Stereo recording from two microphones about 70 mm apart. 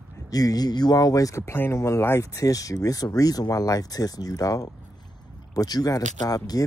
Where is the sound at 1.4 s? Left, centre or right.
Left.